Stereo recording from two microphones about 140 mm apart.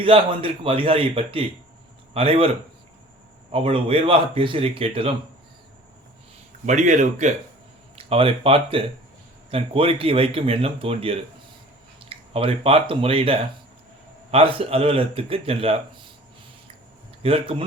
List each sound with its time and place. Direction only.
0.0 s a man's voice: 40° right (ahead or behind)
3.5 s a man's voice: 40° right (ahead or behind)
6.7 s speech: 60° right (ahead or behind)
7.9 s a man's voice: 40° right (ahead or behind)
17.2 s speech: 40° right (ahead or behind)